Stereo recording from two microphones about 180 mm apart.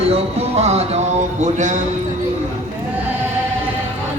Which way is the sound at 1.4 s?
40° right (ahead or behind).